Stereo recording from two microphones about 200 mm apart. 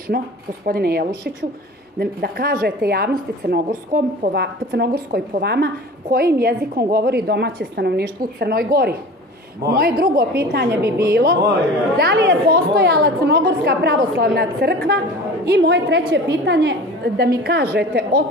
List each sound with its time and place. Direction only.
0.1 s a woman's voice: 50° right (ahead or behind)